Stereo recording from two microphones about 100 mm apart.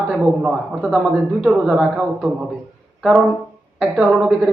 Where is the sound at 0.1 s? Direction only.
Centre (ahead or behind).